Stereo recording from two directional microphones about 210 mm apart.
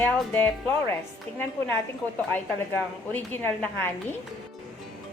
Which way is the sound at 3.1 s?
10° left (ahead or behind).